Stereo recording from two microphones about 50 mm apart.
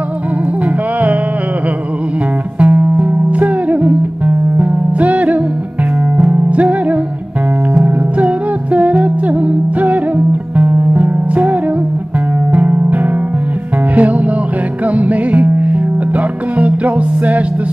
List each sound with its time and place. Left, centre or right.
2.6 s music: right
8.7 s music: right
12.5 s music: right
15.0 s music: right